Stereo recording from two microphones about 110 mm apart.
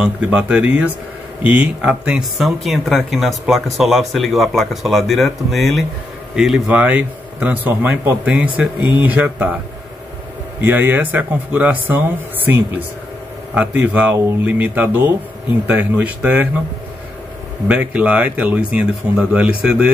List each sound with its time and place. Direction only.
0.0 s speech: 10° right (ahead or behind)
6.7 s speech: 15° right (ahead or behind)
10.6 s speech: 15° right (ahead or behind)
13.6 s speech: 15° right (ahead or behind)
17.6 s speech: 10° right (ahead or behind)